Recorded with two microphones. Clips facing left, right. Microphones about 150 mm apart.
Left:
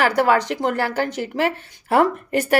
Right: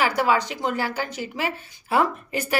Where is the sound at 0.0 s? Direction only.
65° left (ahead or behind).